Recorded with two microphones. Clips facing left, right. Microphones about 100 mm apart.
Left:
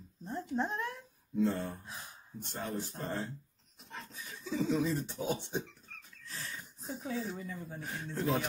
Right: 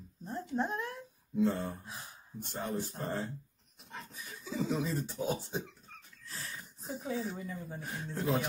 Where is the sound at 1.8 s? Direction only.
Centre (ahead or behind).